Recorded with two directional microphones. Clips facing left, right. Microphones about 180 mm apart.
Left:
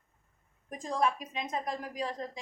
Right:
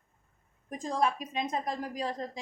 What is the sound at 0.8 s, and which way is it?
A woman's voice, 30° right (ahead or behind).